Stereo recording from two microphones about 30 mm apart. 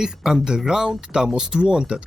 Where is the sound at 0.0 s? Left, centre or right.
Right.